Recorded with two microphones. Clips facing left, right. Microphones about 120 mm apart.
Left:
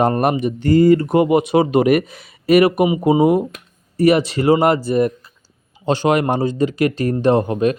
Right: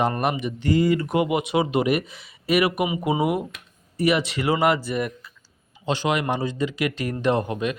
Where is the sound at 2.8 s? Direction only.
30° left (ahead or behind).